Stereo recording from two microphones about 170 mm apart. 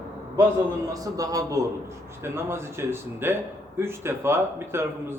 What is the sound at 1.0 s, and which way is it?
A man's voice, 20° right (ahead or behind).